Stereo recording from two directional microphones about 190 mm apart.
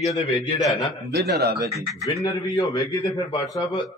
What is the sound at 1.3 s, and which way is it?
Speech, 60° right (ahead or behind).